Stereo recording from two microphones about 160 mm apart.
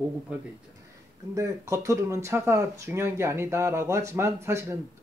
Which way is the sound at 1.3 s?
20° right (ahead or behind).